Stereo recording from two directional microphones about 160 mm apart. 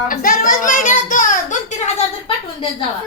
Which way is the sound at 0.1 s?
60° left (ahead or behind).